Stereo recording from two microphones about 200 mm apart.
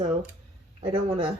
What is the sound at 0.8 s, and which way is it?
Speech, 25° right (ahead or behind).